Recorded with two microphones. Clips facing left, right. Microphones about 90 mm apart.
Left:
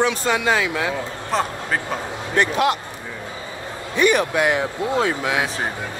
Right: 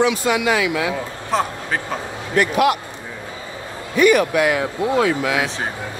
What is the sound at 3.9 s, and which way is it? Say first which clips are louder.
Speech: right 3 dB; 25° left (ahead or behind).